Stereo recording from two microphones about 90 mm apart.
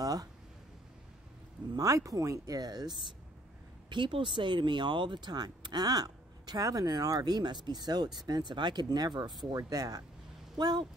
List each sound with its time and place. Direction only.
0.0 s speech: 45° right (ahead or behind)
1.7 s speech: 40° right (ahead or behind)
3.9 s speech: 60° right (ahead or behind)